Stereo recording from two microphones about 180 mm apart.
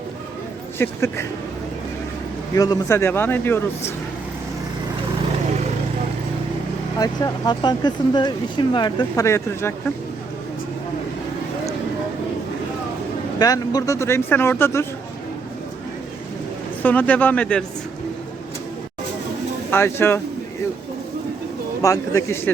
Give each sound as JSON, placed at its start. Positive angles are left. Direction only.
{"t": 0.8, "sound": "speech", "side_deg": 15}
{"t": 2.6, "sound": "speech", "side_deg": 20}
{"t": 7.0, "sound": "speech", "side_deg": 25}
{"t": 13.4, "sound": "speech", "side_deg": 20}
{"t": 16.8, "sound": "speech", "side_deg": 10}
{"t": 19.7, "sound": "speech", "side_deg": 15}
{"t": 21.8, "sound": "speech", "side_deg": 15}